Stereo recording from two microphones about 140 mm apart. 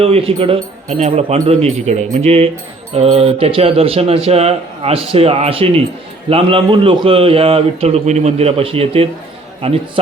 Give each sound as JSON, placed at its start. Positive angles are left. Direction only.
{"t": 0.0, "sound": "speech", "side_deg": -45}